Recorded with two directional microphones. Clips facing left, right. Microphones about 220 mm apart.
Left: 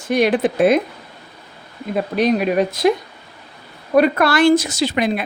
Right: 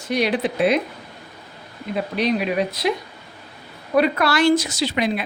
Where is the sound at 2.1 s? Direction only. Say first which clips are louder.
Left 5 dB; 45° left (ahead or behind).